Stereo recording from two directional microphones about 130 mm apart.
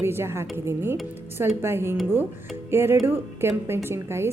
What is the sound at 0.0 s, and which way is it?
A woman's voice, 20° right (ahead or behind).